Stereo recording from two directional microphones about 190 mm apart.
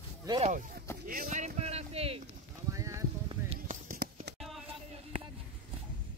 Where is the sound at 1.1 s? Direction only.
45° right (ahead or behind).